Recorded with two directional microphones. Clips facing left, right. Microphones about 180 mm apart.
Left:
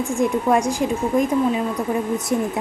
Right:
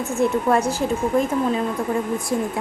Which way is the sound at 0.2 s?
15° left (ahead or behind).